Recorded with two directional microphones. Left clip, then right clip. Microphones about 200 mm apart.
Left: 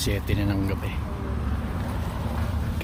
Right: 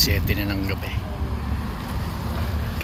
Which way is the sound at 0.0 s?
15° left (ahead or behind).